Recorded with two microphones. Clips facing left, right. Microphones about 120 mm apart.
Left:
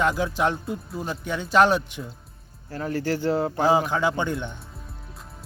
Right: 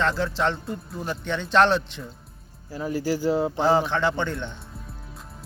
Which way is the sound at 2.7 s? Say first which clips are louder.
Even; 10° right (ahead or behind).